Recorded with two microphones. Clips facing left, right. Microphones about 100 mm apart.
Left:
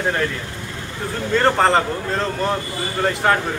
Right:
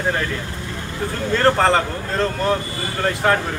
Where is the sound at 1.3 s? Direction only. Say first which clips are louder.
Even; centre (ahead or behind).